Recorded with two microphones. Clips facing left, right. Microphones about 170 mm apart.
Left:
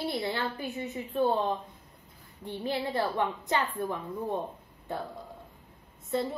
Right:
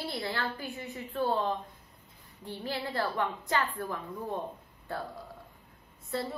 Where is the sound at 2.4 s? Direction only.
20° left (ahead or behind).